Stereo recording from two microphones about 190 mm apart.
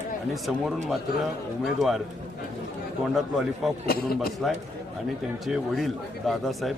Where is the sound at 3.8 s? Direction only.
55° left (ahead or behind).